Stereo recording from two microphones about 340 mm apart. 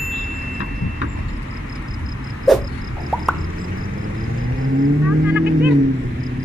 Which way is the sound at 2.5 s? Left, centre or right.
Centre.